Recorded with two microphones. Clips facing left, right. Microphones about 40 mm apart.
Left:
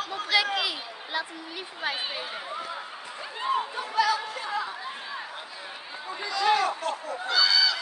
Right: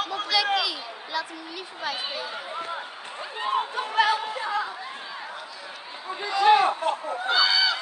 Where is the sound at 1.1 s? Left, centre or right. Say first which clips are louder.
Right 1 dB; left.